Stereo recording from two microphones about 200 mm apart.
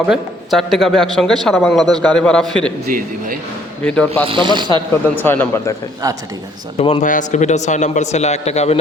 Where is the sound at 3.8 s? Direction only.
5° left (ahead or behind).